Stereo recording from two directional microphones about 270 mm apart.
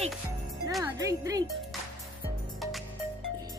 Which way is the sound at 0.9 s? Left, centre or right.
Centre.